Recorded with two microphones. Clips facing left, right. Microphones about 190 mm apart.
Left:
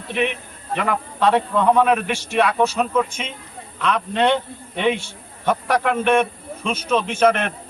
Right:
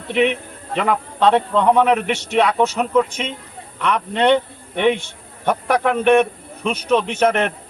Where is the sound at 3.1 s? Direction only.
60° right (ahead or behind).